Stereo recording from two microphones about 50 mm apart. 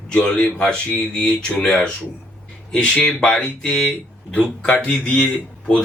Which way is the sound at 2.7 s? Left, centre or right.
Centre.